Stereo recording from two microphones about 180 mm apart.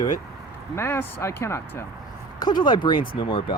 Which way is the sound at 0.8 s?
15° left (ahead or behind).